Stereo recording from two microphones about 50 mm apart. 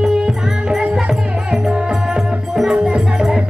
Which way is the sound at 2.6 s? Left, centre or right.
Centre.